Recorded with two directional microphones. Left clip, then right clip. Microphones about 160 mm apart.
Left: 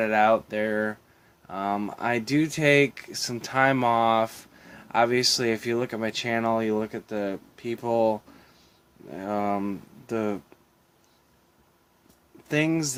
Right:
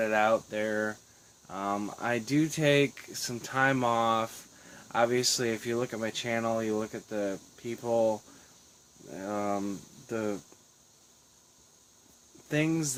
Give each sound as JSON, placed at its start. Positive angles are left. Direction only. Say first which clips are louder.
{"t": 0.0, "sound": "speech", "louder": "left 5 dB", "side_deg": 35}
{"t": 9.1, "sound": "speech", "louder": "left 5 dB", "side_deg": 40}
{"t": 12.5, "sound": "speech", "louder": "left 5 dB", "side_deg": 40}